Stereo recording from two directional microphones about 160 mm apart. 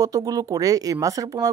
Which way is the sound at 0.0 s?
25° right (ahead or behind).